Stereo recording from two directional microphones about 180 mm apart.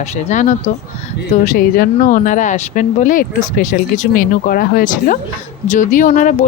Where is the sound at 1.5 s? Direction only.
55° left (ahead or behind).